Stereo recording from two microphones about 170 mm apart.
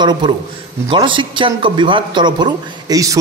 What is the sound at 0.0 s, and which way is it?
Speech, 25° right (ahead or behind).